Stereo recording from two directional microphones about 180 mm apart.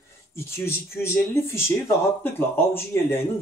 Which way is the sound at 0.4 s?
15° left (ahead or behind).